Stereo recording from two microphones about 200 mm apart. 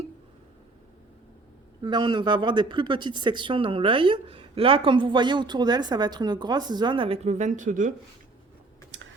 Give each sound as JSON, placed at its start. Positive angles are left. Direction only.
{"t": 1.8, "sound": "speech", "side_deg": -25}
{"t": 8.9, "sound": "computer keyboard", "side_deg": -65}